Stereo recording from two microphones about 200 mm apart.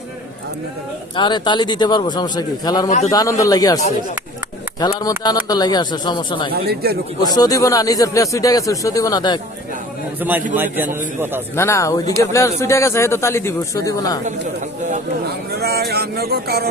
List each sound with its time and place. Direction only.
1.1 s a man's voice: 20° left (ahead or behind)
4.8 s a man's voice: 20° left (ahead or behind)
6.5 s speech: 50° right (ahead or behind)
7.2 s a man's voice: 20° left (ahead or behind)
10.2 s a man's voice: 10° right (ahead or behind)
11.5 s a man's voice: 15° left (ahead or behind)
15.3 s speech: 55° right (ahead or behind)